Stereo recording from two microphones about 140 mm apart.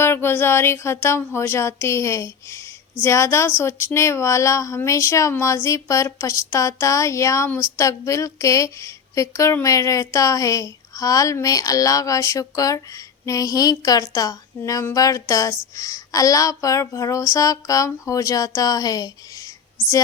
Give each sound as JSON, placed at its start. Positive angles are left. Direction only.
{"t": 0.0, "sound": "speech", "side_deg": 15}